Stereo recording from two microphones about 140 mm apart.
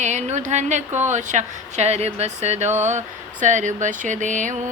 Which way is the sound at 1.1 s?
60° right (ahead or behind).